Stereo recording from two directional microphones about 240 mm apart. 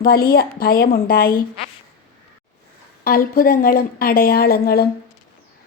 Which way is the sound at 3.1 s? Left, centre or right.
Left.